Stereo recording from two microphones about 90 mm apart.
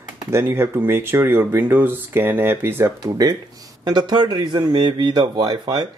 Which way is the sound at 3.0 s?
45° right (ahead or behind).